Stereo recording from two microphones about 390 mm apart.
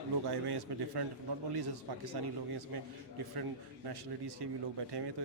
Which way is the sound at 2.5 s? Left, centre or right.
Right.